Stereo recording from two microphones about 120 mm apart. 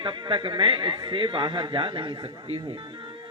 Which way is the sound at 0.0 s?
40° right (ahead or behind).